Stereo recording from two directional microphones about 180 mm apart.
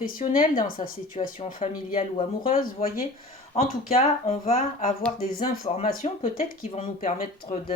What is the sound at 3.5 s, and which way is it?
Speech, 35° left (ahead or behind).